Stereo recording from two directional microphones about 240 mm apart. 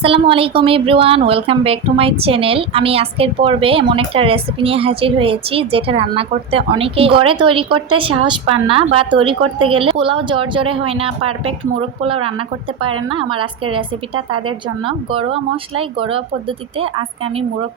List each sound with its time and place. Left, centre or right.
0.0 s a woman's voice: right